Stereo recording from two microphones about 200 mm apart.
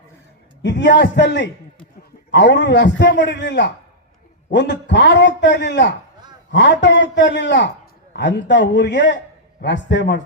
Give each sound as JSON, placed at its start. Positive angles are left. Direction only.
{"t": 0.6, "sound": "a man's voice", "side_deg": 65}